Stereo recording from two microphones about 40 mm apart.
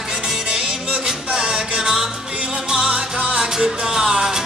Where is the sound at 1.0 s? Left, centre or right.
Right.